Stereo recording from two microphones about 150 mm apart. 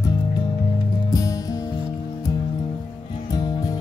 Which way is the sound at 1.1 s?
25° left (ahead or behind).